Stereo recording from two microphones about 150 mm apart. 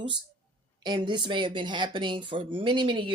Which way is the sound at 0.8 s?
30° right (ahead or behind).